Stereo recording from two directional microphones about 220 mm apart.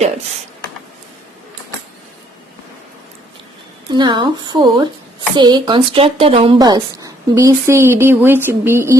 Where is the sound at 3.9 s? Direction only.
20° right (ahead or behind).